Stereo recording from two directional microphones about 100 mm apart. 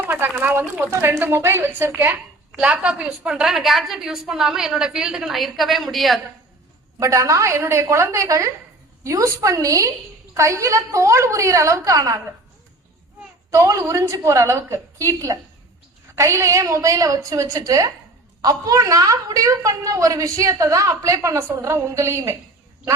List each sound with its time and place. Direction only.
0.0 s a woman's voice: 20° right (ahead or behind); by 6.1 s centre (ahead or behind)
7.0 s a woman's voice: 30° right (ahead or behind)
13.5 s a woman's voice: 30° right (ahead or behind)